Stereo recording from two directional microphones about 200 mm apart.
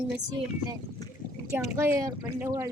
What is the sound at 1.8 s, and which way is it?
Speech, 15° right (ahead or behind).